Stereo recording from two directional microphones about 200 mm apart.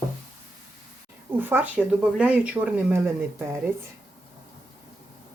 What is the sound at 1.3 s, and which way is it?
Speech, 10° right (ahead or behind).